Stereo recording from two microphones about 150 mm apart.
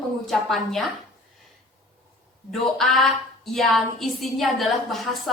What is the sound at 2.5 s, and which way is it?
A woman's voice, centre (ahead or behind).